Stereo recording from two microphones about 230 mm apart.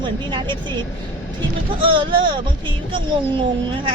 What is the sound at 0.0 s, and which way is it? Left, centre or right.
Speech, centre.